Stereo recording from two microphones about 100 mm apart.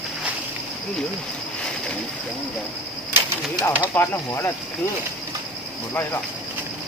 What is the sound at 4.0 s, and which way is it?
Speech, 25° left (ahead or behind).